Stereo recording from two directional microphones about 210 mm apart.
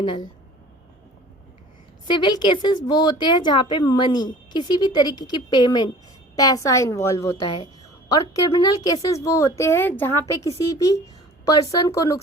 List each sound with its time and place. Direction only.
0.0 s speech: 20° left (ahead or behind)
2.0 s a woman's voice: 20° left (ahead or behind)